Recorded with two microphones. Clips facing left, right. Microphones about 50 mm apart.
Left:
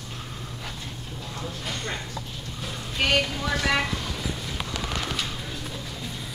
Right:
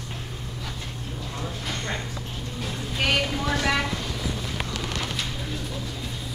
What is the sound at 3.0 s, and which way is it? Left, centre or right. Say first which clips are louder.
Speech: even; centre.